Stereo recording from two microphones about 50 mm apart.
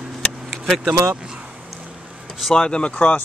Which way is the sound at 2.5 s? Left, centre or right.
Centre.